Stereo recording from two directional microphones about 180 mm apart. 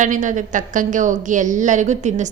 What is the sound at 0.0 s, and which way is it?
A woman's voice, 45° right (ahead or behind).